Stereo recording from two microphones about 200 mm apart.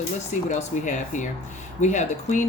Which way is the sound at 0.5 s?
40° left (ahead or behind).